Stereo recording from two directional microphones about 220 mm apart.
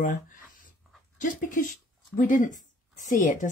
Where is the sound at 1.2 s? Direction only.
35° left (ahead or behind).